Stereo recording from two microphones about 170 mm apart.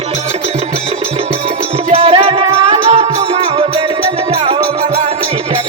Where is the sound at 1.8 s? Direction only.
35° right (ahead or behind).